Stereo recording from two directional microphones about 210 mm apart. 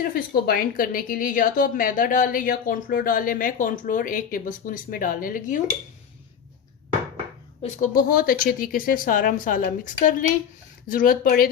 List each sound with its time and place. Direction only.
0.0 s a woman's voice: 45° left (ahead or behind)
7.6 s a woman's voice: 40° left (ahead or behind)